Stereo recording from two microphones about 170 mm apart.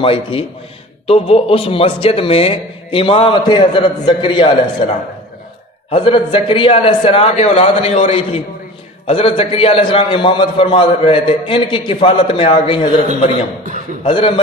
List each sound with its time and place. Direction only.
0.0 s a man's voice: 30° left (ahead or behind)
14.0 s a man's voice: 30° left (ahead or behind)